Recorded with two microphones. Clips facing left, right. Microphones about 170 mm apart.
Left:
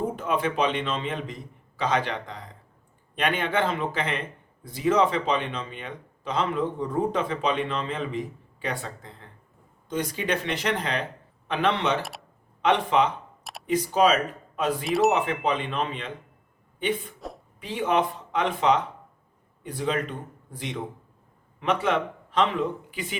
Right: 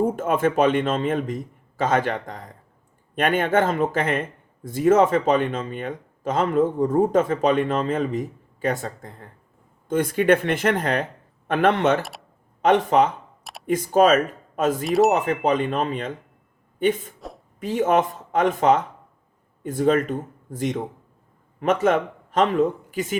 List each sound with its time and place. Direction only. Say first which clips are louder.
0.0 s speech: right 6 dB; 50° right (ahead or behind)
14.8 s speech: right 4 dB; centre (ahead or behind)
15.1 s speech: right 4 dB; 45° right (ahead or behind)
17.2 s a sound: even; centre (ahead or behind)
17.6 s a man's voice: right 5 dB; 45° right (ahead or behind)